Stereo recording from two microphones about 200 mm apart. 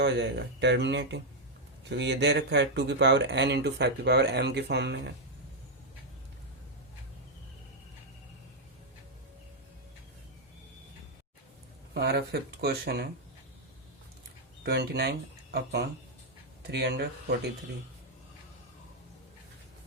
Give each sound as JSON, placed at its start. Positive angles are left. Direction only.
{"t": 0.0, "sound": "speech", "side_deg": -60}
{"t": 11.9, "sound": "speech", "side_deg": -55}
{"t": 14.6, "sound": "speech", "side_deg": -55}